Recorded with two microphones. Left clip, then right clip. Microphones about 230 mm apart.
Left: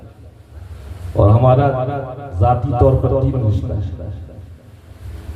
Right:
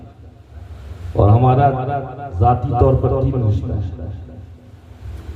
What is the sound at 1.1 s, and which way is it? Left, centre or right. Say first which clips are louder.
A man's voice: left 2 dB; right.